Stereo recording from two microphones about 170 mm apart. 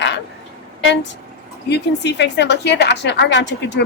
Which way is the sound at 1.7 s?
90° left.